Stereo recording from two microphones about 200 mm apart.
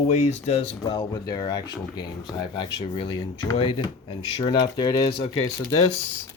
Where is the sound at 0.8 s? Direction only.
20° left (ahead or behind).